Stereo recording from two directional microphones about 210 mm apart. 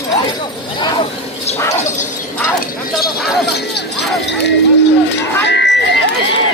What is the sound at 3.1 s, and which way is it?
Jingle bell, centre (ahead or behind).